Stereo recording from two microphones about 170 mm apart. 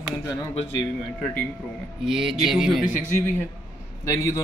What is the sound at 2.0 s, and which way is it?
Speech, 5° right (ahead or behind).